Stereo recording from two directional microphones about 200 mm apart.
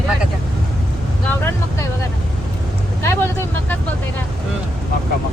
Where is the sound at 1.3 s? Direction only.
10° left (ahead or behind).